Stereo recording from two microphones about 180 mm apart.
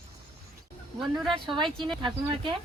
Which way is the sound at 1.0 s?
Centre (ahead or behind).